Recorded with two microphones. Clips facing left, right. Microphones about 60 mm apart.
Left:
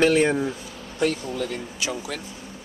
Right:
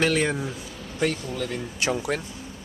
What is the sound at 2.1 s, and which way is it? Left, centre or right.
Speech, right.